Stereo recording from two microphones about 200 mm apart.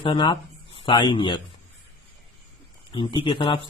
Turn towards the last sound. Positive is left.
turn(degrees=25)  # may be behind; listen again after turning